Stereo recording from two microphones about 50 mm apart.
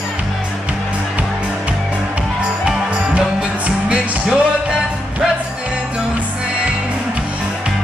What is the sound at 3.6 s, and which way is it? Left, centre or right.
Music, centre.